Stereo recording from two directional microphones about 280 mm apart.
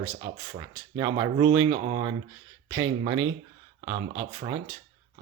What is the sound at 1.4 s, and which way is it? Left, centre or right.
Speech, right.